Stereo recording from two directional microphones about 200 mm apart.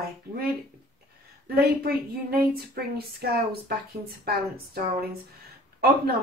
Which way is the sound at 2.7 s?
50° right (ahead or behind).